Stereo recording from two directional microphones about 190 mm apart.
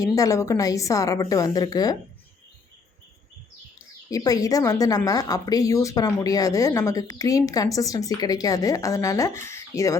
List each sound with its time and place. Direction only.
0.0 s speech: 15° left (ahead or behind)
4.1 s speech: 20° left (ahead or behind)